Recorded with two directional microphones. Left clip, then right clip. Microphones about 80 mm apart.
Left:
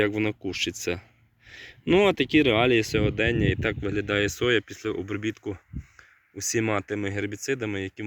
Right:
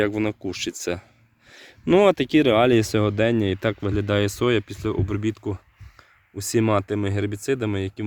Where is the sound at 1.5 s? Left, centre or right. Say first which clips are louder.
Left 2 dB; right.